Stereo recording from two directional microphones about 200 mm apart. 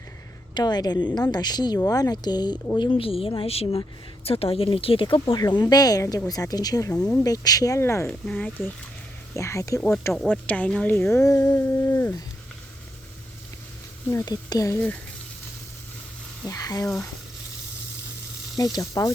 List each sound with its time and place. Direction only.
0.5 s speech: 20° left (ahead or behind)
9.9 s speech: 5° left (ahead or behind)
14.1 s speech: 15° left (ahead or behind)
16.5 s speech: 15° left (ahead or behind)
18.5 s speech: 20° left (ahead or behind)